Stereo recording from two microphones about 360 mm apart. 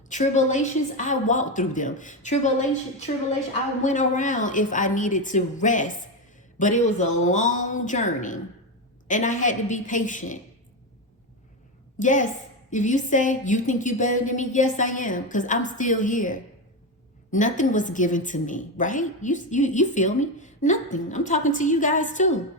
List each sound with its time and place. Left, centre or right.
0.1 s a woman's voice: centre
3.8 s a woman's voice: left
11.9 s a woman's voice: left